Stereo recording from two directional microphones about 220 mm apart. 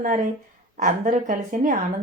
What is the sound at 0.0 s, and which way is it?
Speech, 35° right (ahead or behind).